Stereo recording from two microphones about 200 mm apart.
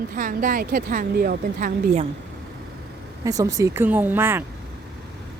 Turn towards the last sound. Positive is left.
turn(degrees=-10)  # may be behind; listen again after turning